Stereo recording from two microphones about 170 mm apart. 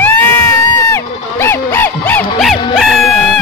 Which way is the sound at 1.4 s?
15° left (ahead or behind).